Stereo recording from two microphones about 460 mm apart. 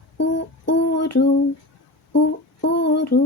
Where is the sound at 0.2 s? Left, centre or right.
Left.